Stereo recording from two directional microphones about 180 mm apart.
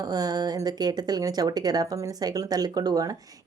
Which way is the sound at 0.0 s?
20° right (ahead or behind).